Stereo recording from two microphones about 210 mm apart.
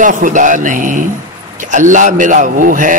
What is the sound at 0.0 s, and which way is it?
A man's voice, 40° right (ahead or behind).